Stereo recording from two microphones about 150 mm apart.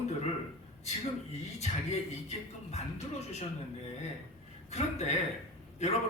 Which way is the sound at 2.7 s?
45° left (ahead or behind).